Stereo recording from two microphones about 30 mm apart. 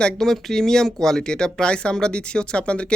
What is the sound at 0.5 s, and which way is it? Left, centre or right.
Speech, centre.